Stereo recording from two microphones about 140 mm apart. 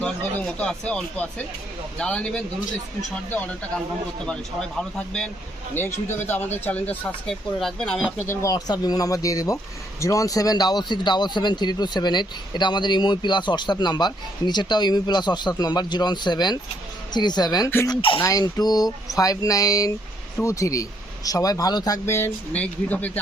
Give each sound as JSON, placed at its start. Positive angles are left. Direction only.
{"t": 0.0, "sound": "speech", "side_deg": 5}
{"t": 4.8, "sound": "speech", "side_deg": 5}
{"t": 5.7, "sound": "speech", "side_deg": 15}
{"t": 8.3, "sound": "a man's voice", "side_deg": 20}
{"t": 18.2, "sound": "speech", "side_deg": 25}